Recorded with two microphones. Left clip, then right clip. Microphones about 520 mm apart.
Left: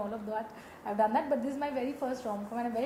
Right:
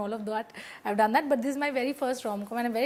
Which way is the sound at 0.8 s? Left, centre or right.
Right.